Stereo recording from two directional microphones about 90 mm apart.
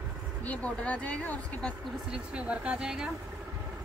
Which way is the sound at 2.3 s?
15° right (ahead or behind).